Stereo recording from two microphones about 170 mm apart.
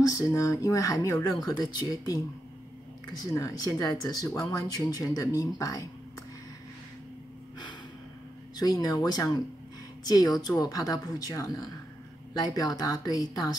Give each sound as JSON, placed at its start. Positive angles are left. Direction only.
{"t": 0.0, "sound": "speech", "side_deg": 20}
{"t": 8.5, "sound": "speech", "side_deg": 25}